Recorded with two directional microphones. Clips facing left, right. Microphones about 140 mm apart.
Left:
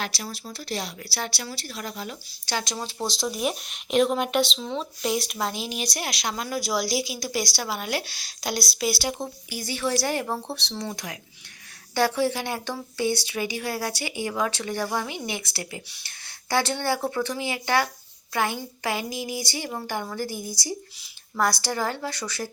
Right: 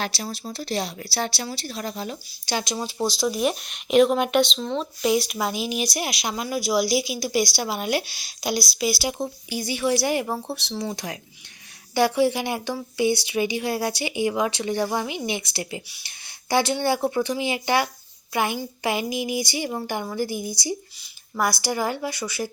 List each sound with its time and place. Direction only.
0.0 s speech: 30° right (ahead or behind)
2.5 s speech: 15° right (ahead or behind)
2.7 s speech: 5° right (ahead or behind)
8.5 s speech: centre (ahead or behind)
10.9 s speech: 30° right (ahead or behind)
11.9 s speech: 15° right (ahead or behind)